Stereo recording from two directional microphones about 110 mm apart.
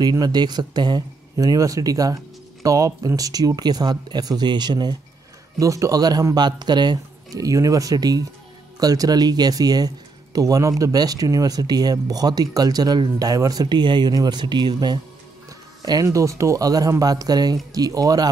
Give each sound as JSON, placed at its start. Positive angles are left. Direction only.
{"t": 0.0, "sound": "speech", "side_deg": -40}
{"t": 5.6, "sound": "speech", "side_deg": -30}